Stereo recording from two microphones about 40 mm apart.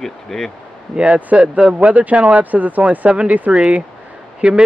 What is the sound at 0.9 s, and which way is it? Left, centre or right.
Speech, right.